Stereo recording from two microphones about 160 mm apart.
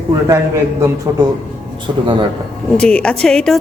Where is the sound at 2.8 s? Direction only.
5° left (ahead or behind).